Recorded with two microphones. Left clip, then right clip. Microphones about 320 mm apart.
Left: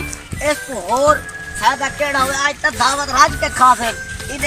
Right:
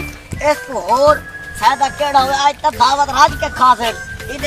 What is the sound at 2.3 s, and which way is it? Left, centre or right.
Speech, centre.